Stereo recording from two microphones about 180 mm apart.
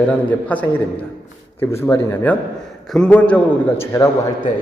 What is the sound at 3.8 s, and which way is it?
Speech, 20° left (ahead or behind).